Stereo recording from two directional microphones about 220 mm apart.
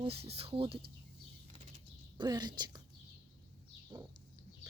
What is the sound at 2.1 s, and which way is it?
Speech, 20° right (ahead or behind).